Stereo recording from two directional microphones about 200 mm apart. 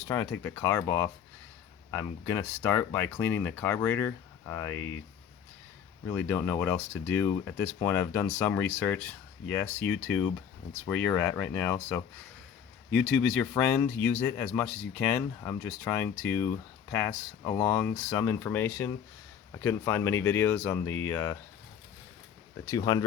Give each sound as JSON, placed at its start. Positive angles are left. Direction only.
{"t": 0.1, "sound": "speech", "side_deg": 10}
{"t": 6.1, "sound": "speech", "side_deg": 10}
{"t": 22.6, "sound": "speech", "side_deg": 20}